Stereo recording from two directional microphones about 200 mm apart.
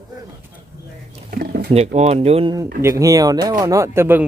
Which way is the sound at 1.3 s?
50° right (ahead or behind).